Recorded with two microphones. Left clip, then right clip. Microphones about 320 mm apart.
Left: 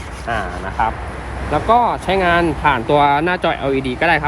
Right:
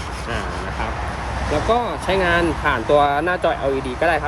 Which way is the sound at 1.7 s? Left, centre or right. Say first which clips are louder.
Left 7 dB; centre.